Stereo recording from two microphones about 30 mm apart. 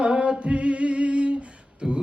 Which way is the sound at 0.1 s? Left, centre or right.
Right.